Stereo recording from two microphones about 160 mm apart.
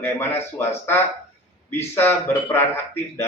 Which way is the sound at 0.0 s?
15° left (ahead or behind).